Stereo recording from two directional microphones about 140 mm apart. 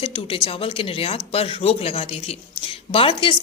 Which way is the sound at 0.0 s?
40° left (ahead or behind).